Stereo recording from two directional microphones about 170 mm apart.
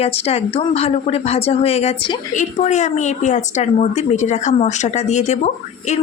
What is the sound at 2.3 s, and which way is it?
Speech, 45° left (ahead or behind).